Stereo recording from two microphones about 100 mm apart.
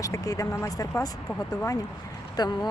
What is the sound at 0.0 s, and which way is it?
Speech, 35° left (ahead or behind).